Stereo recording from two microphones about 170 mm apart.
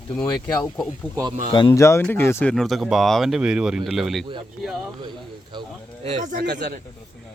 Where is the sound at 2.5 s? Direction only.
Centre (ahead or behind).